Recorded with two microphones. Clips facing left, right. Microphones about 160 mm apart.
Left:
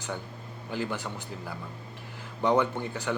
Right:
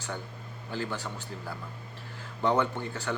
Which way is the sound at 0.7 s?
15° left (ahead or behind).